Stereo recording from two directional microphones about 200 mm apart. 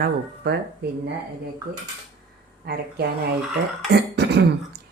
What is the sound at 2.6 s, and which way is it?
Speech, 55° right (ahead or behind).